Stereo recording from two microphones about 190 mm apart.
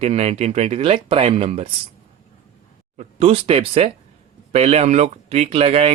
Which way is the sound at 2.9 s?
35° right (ahead or behind).